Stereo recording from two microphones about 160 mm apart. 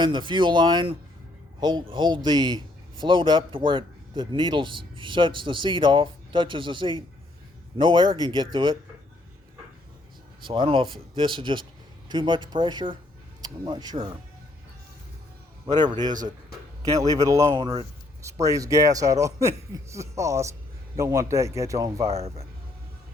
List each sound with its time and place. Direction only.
0.0 s a man's voice: 30° right (ahead or behind)
10.4 s a man's voice: 30° right (ahead or behind)
15.8 s a man's voice: 25° right (ahead or behind)
22.1 s speech: 40° right (ahead or behind)